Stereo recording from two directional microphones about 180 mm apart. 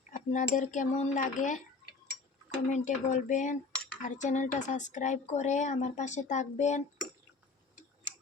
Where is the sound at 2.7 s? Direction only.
40° left (ahead or behind).